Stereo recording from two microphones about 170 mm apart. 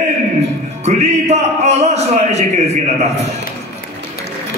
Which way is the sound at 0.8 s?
40° right (ahead or behind).